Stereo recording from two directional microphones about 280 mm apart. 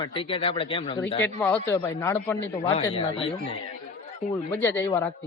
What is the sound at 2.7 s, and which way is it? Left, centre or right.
Speech, centre.